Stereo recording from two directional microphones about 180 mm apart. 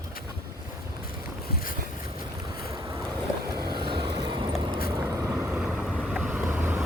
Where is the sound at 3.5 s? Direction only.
25° right (ahead or behind).